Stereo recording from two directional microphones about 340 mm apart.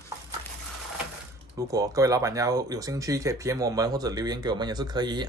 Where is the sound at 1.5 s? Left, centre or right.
Centre.